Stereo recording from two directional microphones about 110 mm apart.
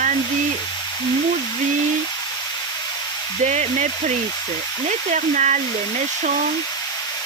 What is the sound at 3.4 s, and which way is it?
Speech, 90° right.